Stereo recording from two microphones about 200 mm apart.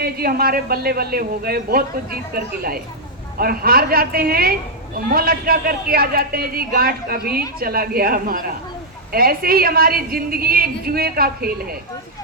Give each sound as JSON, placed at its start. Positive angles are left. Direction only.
{"t": 0.0, "sound": "a man's voice", "side_deg": -50}